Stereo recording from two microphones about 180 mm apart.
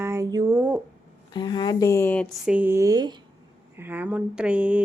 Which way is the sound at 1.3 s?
25° left (ahead or behind).